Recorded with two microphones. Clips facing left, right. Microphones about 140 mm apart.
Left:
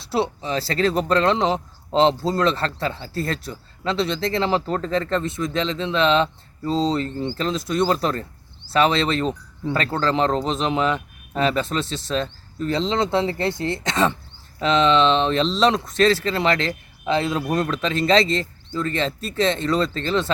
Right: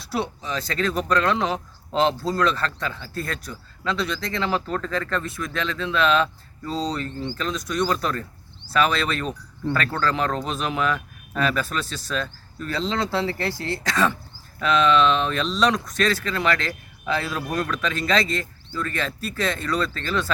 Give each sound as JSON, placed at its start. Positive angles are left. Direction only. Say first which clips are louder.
{"t": 0.0, "sound": "speech", "louder": "left 4 dB", "side_deg": 25}